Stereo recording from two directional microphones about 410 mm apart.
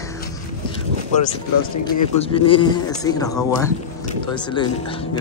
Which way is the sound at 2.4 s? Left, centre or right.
Centre.